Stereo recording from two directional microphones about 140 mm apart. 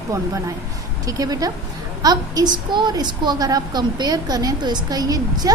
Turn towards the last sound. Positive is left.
turn(degrees=-25)  # may be behind; listen again after turning